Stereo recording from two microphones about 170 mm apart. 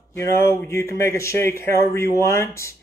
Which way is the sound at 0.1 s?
15° left (ahead or behind).